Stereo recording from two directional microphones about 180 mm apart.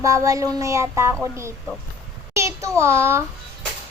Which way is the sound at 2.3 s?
15° right (ahead or behind).